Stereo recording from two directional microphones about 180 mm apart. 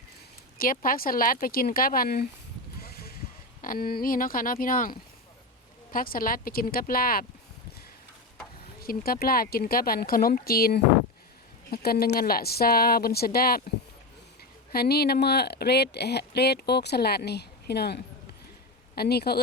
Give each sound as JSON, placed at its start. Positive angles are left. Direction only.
{"t": 0.6, "sound": "speech", "side_deg": 50}
{"t": 2.8, "sound": "boat", "side_deg": 60}
{"t": 3.6, "sound": "speech", "side_deg": 55}
{"t": 8.8, "sound": "speech", "side_deg": 55}
{"t": 14.7, "sound": "speech", "side_deg": 60}